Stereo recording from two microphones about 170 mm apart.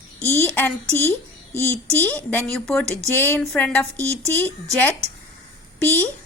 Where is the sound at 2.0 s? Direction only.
10° left (ahead or behind).